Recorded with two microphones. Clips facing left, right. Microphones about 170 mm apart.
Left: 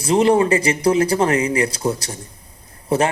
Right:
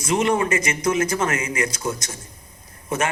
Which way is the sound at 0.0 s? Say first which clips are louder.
Left 6 dB; 30° left (ahead or behind).